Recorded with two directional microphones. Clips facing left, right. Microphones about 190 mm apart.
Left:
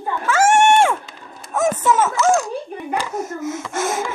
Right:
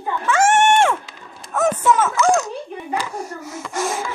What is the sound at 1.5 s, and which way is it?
Speech, 10° left (ahead or behind).